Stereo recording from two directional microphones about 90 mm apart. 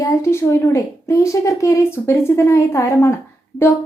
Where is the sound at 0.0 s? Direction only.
30° left (ahead or behind).